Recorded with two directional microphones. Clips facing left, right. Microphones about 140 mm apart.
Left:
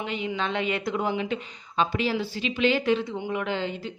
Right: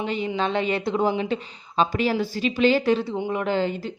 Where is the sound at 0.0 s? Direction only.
35° right (ahead or behind).